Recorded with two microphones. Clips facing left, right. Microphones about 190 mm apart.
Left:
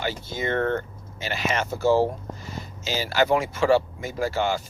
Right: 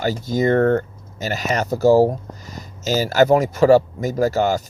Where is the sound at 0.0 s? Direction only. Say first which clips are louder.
Right 9 dB; 40° right (ahead or behind).